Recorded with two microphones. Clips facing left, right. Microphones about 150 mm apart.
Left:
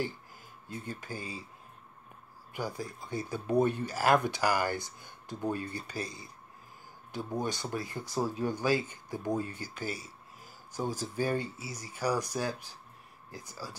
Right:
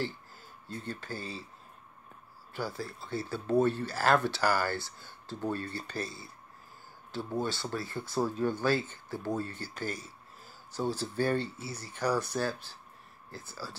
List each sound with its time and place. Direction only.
0.7 s speech: 10° left (ahead or behind)
2.5 s speech: 15° left (ahead or behind)